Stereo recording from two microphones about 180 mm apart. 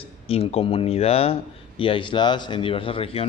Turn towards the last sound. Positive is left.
turn(degrees=30)  # may be behind; listen again after turning